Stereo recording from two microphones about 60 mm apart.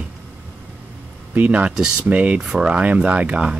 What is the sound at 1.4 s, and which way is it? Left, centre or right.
Speech, right.